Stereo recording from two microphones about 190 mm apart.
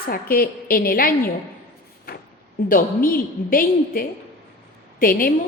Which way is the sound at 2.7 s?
50° left (ahead or behind).